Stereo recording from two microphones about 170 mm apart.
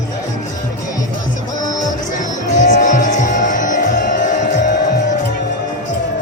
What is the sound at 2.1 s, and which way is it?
Music, 45° left (ahead or behind).